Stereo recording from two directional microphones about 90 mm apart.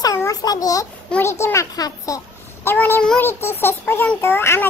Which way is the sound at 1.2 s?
30° left (ahead or behind).